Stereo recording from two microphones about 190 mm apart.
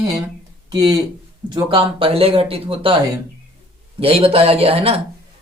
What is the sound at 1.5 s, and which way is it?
Speech, 25° right (ahead or behind).